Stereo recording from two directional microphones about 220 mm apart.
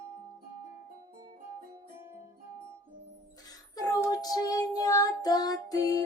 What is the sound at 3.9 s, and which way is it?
Music, 15° left (ahead or behind).